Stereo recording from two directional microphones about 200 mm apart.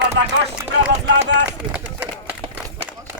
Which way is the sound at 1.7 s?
5° right (ahead or behind).